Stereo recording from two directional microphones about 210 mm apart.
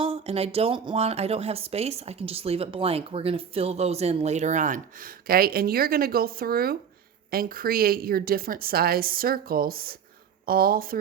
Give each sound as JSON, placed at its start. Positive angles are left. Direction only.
{"t": 0.0, "sound": "a woman's voice", "side_deg": -25}